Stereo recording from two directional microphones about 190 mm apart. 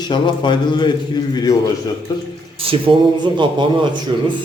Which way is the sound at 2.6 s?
30° right (ahead or behind).